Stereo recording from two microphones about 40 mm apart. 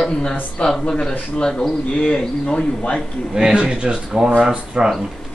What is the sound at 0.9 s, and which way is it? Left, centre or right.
Speech, centre.